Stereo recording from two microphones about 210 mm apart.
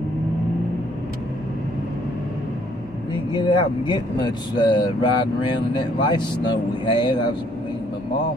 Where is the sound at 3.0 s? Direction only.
20° left (ahead or behind).